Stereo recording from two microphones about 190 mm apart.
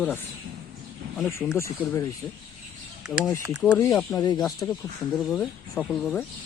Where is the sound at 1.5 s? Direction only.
15° left (ahead or behind).